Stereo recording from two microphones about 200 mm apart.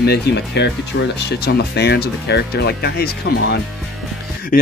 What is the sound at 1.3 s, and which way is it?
Speech, 55° left (ahead or behind).